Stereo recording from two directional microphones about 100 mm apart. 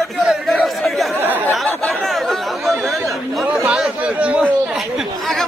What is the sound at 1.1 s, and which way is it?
Speech, 20° right (ahead or behind).